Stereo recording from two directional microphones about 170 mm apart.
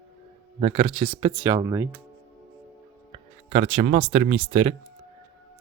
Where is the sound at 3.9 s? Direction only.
35° right (ahead or behind).